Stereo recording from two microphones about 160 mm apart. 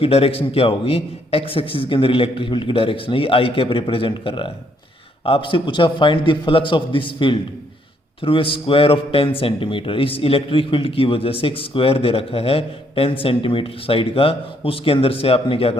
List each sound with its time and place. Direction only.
0.0 s a man's voice: 40° left (ahead or behind)